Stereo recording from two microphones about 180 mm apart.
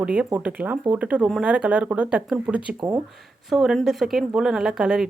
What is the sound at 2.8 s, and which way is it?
Speech, 20° right (ahead or behind).